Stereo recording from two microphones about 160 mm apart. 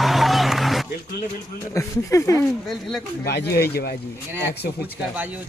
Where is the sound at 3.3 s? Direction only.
90° left.